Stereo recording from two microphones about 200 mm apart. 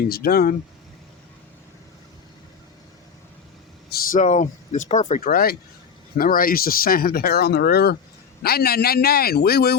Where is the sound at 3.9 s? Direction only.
40° left (ahead or behind).